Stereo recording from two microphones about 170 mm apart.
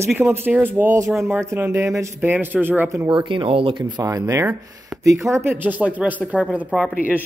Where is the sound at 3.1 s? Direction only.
30° right (ahead or behind).